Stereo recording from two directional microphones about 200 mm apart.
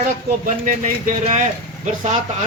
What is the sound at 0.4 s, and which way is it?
Speech, 40° right (ahead or behind).